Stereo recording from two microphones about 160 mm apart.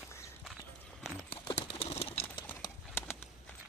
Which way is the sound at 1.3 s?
35° left (ahead or behind).